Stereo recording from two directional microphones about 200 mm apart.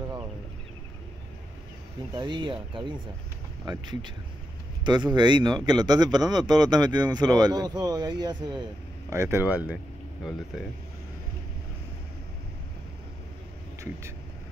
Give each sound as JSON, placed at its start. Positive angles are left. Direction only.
{"t": 2.1, "sound": "speech", "side_deg": -25}